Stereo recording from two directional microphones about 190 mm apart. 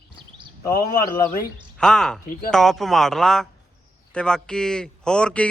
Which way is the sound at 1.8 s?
5° left (ahead or behind).